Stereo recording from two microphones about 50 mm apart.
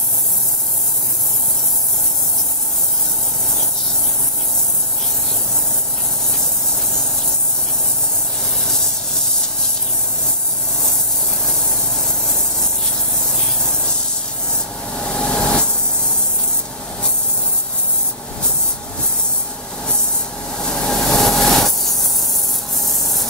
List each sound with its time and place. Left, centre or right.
15.0 s vehicle: left
20.6 s vehicle: centre
22.8 s rub: centre